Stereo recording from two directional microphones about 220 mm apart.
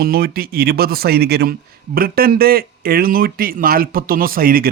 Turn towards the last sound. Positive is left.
turn(degrees=-40)  # may be behind; listen again after turning